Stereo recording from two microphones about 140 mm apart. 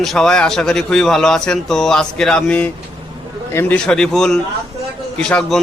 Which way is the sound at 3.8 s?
5° left (ahead or behind).